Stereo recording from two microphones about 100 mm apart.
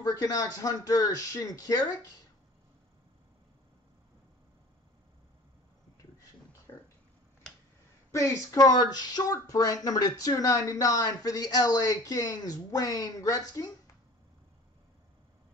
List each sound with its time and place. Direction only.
0.0 s speech: 40° left (ahead or behind)
8.1 s speech: 30° left (ahead or behind)